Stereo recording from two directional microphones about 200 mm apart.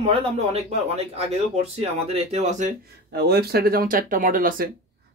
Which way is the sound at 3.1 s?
50° right (ahead or behind).